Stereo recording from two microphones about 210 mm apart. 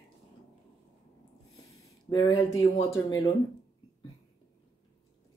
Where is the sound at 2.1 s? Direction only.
15° left (ahead or behind).